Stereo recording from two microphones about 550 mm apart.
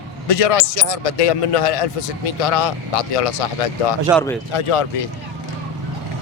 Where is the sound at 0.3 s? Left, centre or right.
Left.